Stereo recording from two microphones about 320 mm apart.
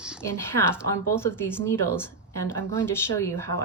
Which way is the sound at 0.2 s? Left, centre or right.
Centre.